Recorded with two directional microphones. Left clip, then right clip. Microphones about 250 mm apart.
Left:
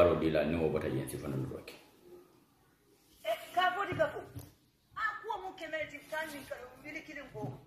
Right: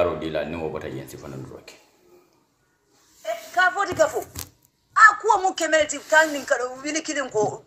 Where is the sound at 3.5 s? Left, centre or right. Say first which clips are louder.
Right 12 dB; right.